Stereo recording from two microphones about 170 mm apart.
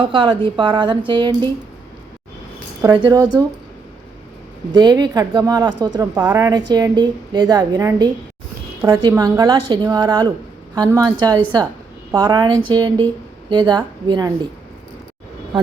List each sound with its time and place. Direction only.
0.0 s a woman's voice: 30° right (ahead or behind)
2.8 s a woman's voice: 25° right (ahead or behind)
4.7 s a woman's voice: 25° right (ahead or behind)